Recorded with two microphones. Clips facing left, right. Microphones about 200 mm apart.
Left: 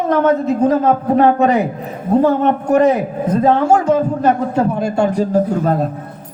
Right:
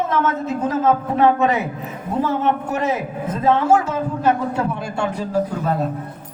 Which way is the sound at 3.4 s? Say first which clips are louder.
Left 3 dB; 40° left (ahead or behind).